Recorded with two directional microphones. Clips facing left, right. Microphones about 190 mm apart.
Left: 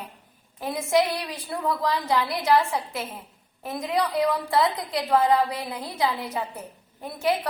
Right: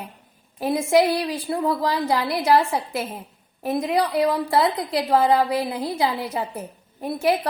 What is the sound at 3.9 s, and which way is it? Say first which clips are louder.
A woman's voice: right 2 dB; 35° right (ahead or behind).